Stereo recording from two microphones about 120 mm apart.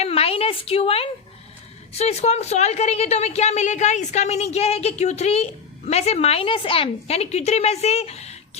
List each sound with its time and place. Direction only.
0.0 s a woman's voice: 55° left (ahead or behind)